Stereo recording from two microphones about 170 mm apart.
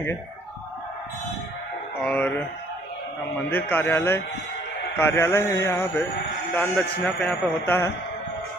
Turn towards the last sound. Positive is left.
turn(degrees=5)  # may be behind; listen again after turning